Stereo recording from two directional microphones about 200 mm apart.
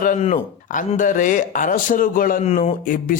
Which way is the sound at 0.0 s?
40° left (ahead or behind).